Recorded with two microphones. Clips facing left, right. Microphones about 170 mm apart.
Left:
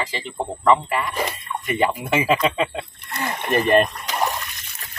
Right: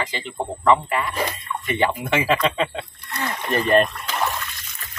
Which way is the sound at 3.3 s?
20° left (ahead or behind).